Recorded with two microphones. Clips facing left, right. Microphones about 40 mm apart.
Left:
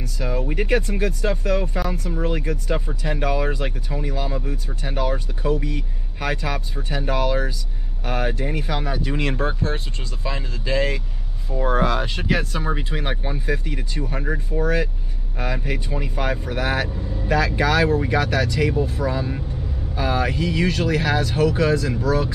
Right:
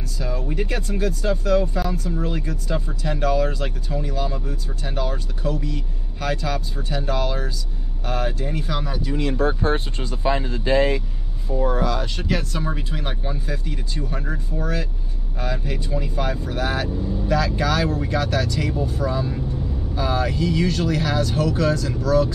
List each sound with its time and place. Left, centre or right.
0.2 s speech: left
9.0 s speech: left
9.6 s speech: right
11.6 s speech: left
12.2 s speech: left